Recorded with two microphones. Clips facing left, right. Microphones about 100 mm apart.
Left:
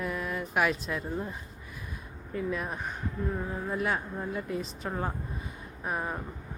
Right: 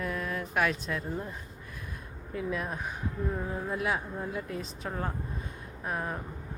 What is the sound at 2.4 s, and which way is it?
Speech, centre (ahead or behind).